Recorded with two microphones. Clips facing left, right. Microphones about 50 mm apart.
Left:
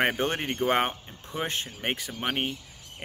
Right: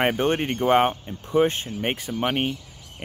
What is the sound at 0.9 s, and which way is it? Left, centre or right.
Speech, centre.